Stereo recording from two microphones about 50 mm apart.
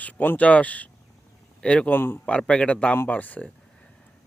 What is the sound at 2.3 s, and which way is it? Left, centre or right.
Speech, left.